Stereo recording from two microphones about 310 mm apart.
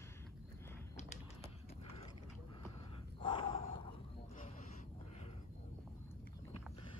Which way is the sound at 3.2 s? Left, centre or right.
Centre.